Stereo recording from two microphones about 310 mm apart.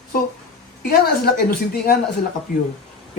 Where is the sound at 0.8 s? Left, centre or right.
Left.